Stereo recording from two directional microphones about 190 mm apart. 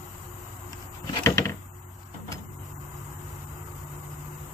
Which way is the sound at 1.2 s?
15° left (ahead or behind).